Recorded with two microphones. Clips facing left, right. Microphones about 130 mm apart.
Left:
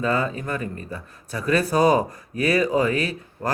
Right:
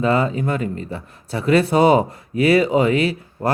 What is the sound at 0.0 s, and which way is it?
A man's voice, 25° right (ahead or behind).